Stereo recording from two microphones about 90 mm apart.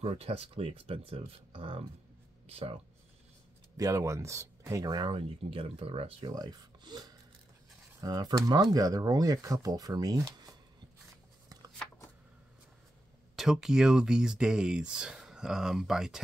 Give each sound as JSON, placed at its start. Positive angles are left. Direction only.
{"t": 0.1, "sound": "speech", "side_deg": -90}
{"t": 3.7, "sound": "speech", "side_deg": -35}
{"t": 4.9, "sound": "speech", "side_deg": -70}
{"t": 6.3, "sound": "speech", "side_deg": -45}
{"t": 13.4, "sound": "speech", "side_deg": -5}